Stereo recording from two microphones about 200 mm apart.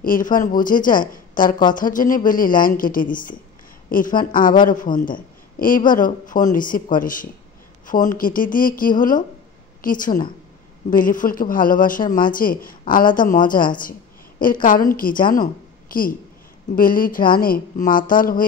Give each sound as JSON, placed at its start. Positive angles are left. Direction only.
{"t": 0.0, "sound": "a woman's voice", "side_deg": 45}